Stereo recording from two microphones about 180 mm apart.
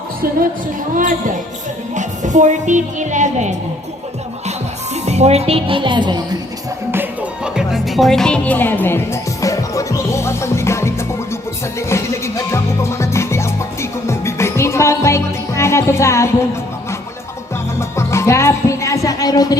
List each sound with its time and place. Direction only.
2.0 s speech: 40° right (ahead or behind)
5.0 s speech: 35° right (ahead or behind)
6.9 s music: 10° right (ahead or behind); by 16.3 s 15° left (ahead or behind)
17.7 s music: 15° left (ahead or behind)